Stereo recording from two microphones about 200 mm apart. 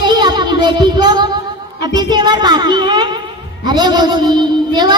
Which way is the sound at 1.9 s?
20° right (ahead or behind).